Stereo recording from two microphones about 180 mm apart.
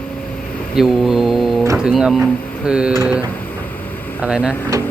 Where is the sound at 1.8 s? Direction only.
5° right (ahead or behind).